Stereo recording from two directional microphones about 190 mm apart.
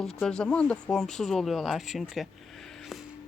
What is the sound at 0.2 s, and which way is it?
Speech, 5° left (ahead or behind).